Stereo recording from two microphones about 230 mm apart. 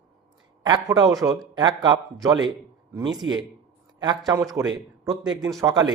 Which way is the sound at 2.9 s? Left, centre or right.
Centre.